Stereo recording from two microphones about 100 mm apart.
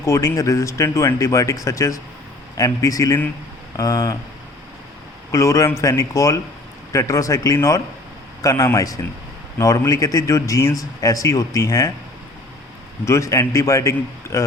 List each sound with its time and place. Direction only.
0.0 s a man's voice: 30° left (ahead or behind)
5.3 s a man's voice: 30° left (ahead or behind)
13.1 s a man's voice: 30° left (ahead or behind)